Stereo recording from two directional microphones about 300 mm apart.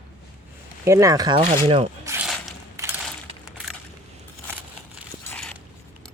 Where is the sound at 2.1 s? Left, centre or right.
Centre.